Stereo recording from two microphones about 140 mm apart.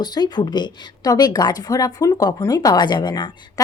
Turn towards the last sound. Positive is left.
turn(degrees=30)  # may be behind; listen again after turning